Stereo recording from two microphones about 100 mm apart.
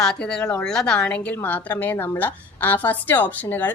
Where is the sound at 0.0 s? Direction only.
5° left (ahead or behind).